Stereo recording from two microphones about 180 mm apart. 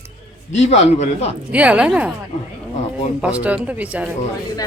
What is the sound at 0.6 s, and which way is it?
Speech, 35° left (ahead or behind).